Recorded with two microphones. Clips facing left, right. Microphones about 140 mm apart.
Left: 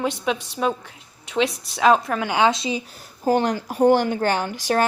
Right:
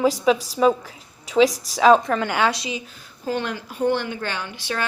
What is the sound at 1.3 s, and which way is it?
Speech, centre (ahead or behind).